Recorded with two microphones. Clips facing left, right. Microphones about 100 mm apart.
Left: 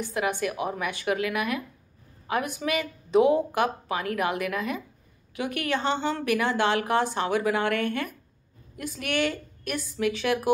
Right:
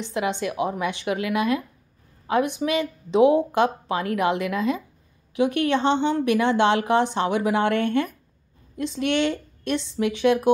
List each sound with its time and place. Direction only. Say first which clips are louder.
0.0 s a woman's voice: right 2 dB; 20° right (ahead or behind)